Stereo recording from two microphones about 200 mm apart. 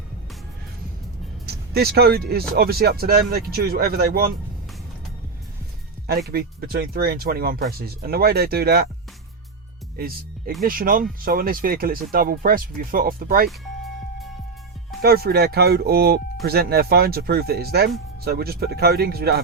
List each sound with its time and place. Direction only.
1.5 s speech: 50° right (ahead or behind)
6.1 s speech: 50° right (ahead or behind)
10.6 s speech: 45° right (ahead or behind)
15.0 s speech: 50° right (ahead or behind)